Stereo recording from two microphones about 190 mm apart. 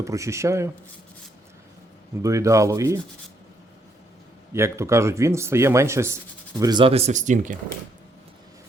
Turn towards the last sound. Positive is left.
turn(degrees=-40)  # may be behind; listen again after turning